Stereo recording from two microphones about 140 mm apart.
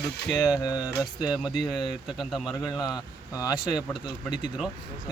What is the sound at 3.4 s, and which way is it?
Speech, 30° left (ahead or behind).